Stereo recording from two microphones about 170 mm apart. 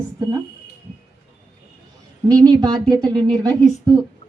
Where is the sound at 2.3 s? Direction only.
20° right (ahead or behind).